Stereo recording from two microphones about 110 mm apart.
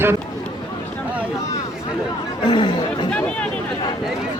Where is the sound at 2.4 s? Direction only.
50° left (ahead or behind).